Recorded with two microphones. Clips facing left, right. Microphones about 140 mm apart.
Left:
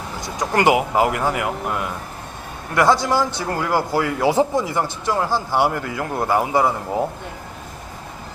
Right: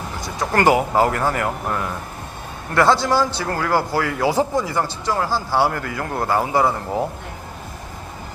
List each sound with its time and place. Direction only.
0.2 s a man's voice: 15° left (ahead or behind)